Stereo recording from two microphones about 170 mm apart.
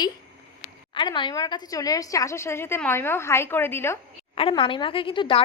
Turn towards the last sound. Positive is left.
turn(degrees=30)  # may be behind; listen again after turning